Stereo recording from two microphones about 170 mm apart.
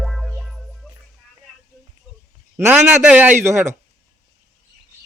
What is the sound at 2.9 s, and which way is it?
Speech, 5° right (ahead or behind).